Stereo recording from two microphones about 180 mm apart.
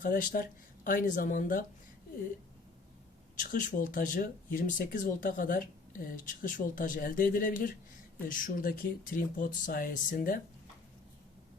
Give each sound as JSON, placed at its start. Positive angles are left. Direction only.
{"t": 0.0, "sound": "speech", "side_deg": 50}
{"t": 3.3, "sound": "speech", "side_deg": 50}